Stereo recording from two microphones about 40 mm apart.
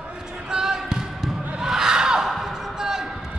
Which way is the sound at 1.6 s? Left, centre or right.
Centre.